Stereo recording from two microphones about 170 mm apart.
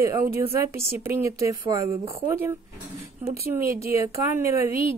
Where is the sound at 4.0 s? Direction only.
15° right (ahead or behind).